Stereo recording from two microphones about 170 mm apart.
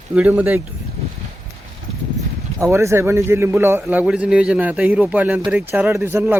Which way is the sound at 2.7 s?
15° right (ahead or behind).